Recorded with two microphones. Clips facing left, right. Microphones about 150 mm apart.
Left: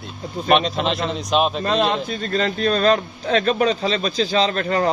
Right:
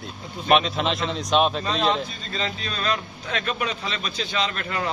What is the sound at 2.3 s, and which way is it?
A man's voice, 50° left (ahead or behind).